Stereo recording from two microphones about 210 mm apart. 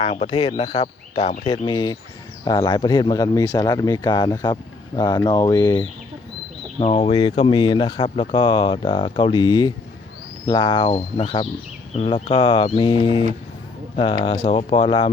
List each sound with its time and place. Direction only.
0.0 s speech: 30° left (ahead or behind)